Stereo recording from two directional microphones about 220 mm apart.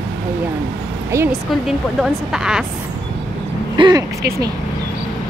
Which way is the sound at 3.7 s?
20° right (ahead or behind).